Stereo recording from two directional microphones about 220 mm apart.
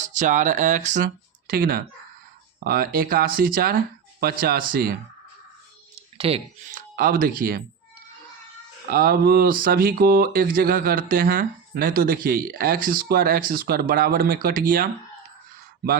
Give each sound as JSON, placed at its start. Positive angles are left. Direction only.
{"t": 0.0, "sound": "speech", "side_deg": -35}
{"t": 6.1, "sound": "speech", "side_deg": -25}
{"t": 6.7, "sound": "speech", "side_deg": -40}
{"t": 8.9, "sound": "speech", "side_deg": -40}